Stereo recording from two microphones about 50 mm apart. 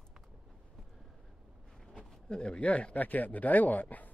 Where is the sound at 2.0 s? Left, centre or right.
Centre.